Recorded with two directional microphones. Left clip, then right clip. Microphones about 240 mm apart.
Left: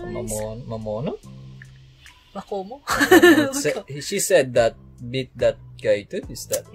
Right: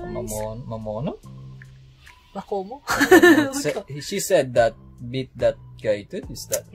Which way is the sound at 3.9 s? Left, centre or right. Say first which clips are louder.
Left 2 dB; centre.